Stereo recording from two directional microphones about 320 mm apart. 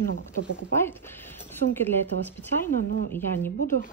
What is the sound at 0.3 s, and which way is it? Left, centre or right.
Speech, centre.